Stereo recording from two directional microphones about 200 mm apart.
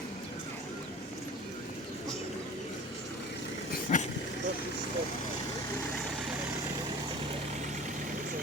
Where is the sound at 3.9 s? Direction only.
35° left (ahead or behind).